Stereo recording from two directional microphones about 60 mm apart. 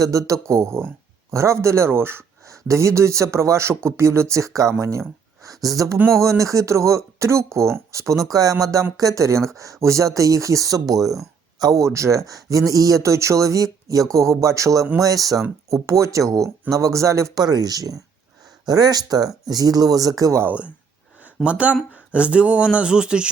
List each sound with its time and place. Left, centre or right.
0.0 s speech: right
2.5 s a man's voice: right
11.6 s a man's voice: right
11.9 s a man's voice: right
15.7 s a man's voice: right
21.4 s speech: right